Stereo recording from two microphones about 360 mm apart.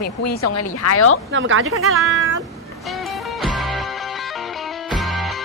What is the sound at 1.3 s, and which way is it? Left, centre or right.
Speech, right.